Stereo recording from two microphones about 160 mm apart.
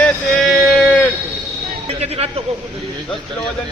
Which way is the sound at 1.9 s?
40° right (ahead or behind).